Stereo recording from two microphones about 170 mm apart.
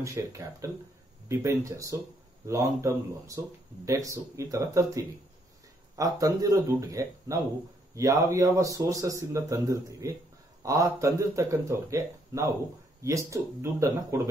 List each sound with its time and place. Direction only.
0.0 s speech: 20° right (ahead or behind)